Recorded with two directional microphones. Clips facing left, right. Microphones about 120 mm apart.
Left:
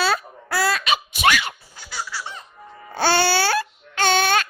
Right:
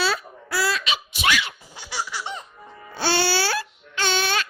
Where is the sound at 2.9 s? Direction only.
50° left (ahead or behind).